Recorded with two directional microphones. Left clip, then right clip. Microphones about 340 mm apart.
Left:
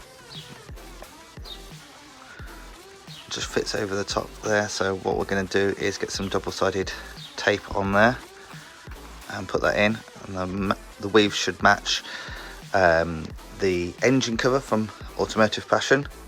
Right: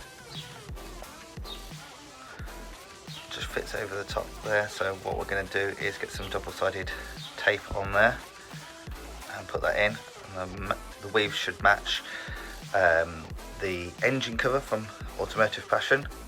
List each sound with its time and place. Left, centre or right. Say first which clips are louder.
3.2 s speech: left 7 dB; centre
9.3 s speech: left 5 dB; centre